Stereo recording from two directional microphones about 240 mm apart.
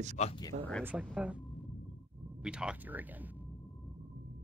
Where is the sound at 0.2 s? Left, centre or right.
Left.